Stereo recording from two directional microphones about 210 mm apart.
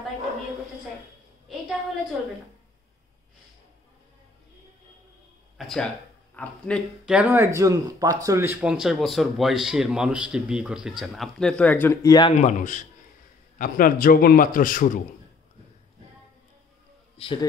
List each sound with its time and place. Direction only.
5.6 s speech: centre (ahead or behind); by 12.4 s 20° left (ahead or behind)
12.4 s a man's voice: 35° left (ahead or behind)
17.2 s speech: 25° left (ahead or behind)